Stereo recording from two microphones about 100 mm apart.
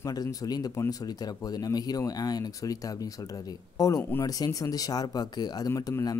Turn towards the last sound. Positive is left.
turn(degrees=40)  # may be behind; listen again after turning